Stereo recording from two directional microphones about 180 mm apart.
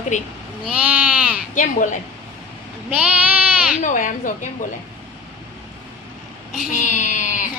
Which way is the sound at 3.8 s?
45° left (ahead or behind).